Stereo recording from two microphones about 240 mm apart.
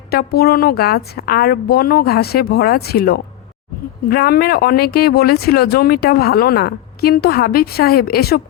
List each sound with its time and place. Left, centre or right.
0.1 s speech: left